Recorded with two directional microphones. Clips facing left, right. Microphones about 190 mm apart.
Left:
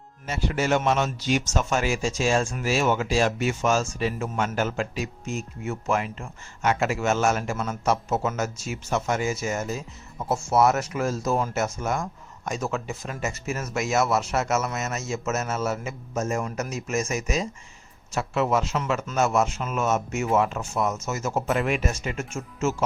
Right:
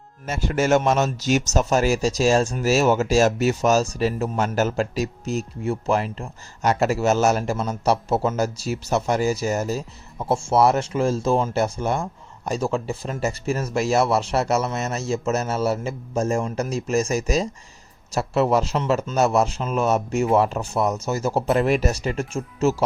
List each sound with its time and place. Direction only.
0.3 s a man's voice: 45° right (ahead or behind)